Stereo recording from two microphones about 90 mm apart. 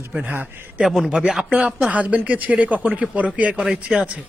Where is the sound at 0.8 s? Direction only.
5° right (ahead or behind).